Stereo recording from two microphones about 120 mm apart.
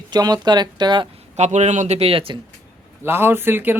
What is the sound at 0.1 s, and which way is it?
Speech, 35° right (ahead or behind).